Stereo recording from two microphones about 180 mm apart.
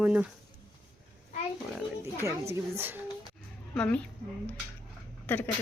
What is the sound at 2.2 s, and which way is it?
Speech, 15° right (ahead or behind).